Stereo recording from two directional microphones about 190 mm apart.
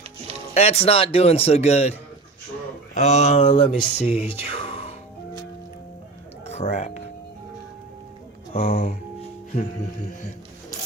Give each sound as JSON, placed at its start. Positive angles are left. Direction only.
{"t": 0.5, "sound": "speech", "side_deg": 35}
{"t": 6.4, "sound": "music", "side_deg": 35}
{"t": 8.5, "sound": "speech", "side_deg": 35}
{"t": 9.5, "sound": "music", "side_deg": 45}